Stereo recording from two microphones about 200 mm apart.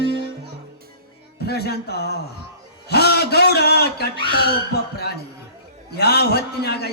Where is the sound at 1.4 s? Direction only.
55° left (ahead or behind).